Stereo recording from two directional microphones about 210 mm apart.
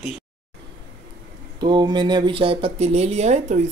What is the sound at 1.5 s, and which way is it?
Speech, 20° right (ahead or behind).